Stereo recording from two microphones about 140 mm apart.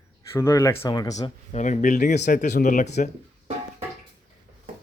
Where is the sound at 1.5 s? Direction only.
60° left (ahead or behind).